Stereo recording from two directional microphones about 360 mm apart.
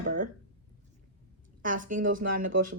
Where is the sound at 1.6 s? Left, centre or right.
Right.